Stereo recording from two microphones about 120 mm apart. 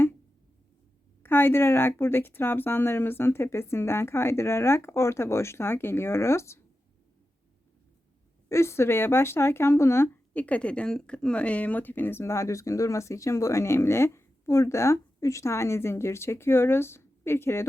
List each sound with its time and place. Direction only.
1.2 s a woman's voice: 20° left (ahead or behind)
8.4 s speech: 25° left (ahead or behind)